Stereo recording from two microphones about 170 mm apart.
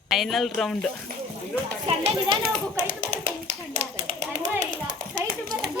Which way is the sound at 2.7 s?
45° right (ahead or behind).